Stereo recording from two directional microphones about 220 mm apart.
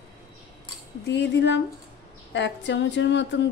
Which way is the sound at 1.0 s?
50° left (ahead or behind).